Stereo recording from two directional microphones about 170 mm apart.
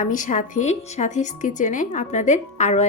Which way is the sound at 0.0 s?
50° left (ahead or behind).